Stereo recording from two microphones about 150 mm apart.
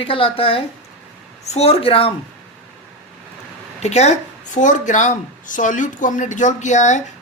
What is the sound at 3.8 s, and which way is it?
A woman's voice, 45° left (ahead or behind).